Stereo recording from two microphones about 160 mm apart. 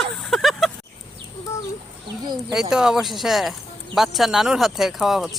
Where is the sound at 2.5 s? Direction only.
5° right (ahead or behind).